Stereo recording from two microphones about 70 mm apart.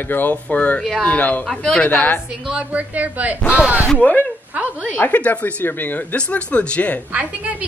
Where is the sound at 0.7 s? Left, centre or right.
Centre.